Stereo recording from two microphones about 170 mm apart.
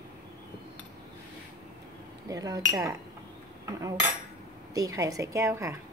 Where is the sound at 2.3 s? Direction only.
20° right (ahead or behind).